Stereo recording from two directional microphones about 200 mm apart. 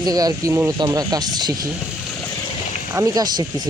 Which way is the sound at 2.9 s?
15° right (ahead or behind).